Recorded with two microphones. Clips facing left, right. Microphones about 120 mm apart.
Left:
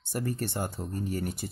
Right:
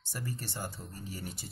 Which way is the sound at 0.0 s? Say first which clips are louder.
Left 9 dB; 55° left (ahead or behind).